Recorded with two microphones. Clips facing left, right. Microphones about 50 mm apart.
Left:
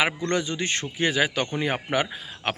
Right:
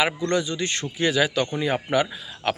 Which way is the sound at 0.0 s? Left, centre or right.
Left.